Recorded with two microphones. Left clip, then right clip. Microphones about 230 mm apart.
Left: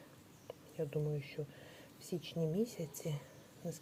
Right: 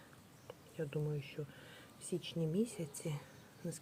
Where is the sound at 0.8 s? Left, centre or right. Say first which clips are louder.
Left 2 dB; centre.